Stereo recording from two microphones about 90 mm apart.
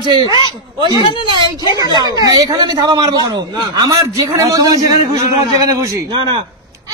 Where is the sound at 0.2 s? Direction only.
60° left (ahead or behind).